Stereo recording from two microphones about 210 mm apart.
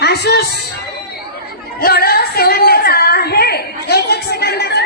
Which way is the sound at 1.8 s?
45° left (ahead or behind).